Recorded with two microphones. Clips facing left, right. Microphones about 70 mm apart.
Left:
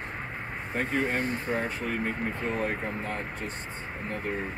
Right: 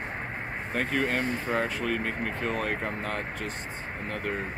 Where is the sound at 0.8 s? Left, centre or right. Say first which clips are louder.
Even; right.